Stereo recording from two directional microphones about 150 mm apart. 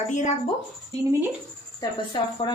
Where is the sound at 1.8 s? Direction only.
35° left (ahead or behind).